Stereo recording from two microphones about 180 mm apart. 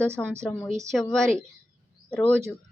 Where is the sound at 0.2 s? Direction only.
5° left (ahead or behind).